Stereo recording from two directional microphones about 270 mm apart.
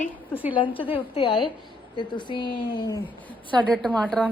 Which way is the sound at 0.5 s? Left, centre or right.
Centre.